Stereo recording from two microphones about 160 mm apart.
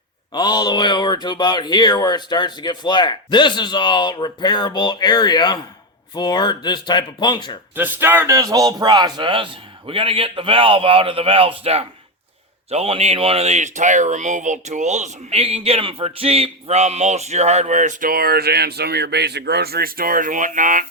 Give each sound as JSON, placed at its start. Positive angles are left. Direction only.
{"t": 0.3, "sound": "speech", "side_deg": 25}
{"t": 7.8, "sound": "speech", "side_deg": -10}